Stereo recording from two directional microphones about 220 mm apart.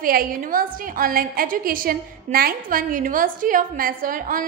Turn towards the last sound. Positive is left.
turn(degrees=-40)  # may be behind; listen again after turning